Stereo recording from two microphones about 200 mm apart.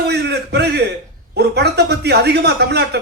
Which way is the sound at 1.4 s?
55° right (ahead or behind).